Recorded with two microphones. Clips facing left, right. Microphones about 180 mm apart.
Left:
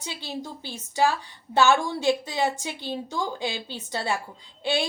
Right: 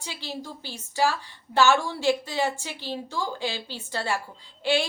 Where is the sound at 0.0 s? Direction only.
15° left (ahead or behind).